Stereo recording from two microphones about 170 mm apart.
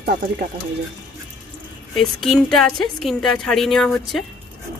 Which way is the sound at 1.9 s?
Centre (ahead or behind).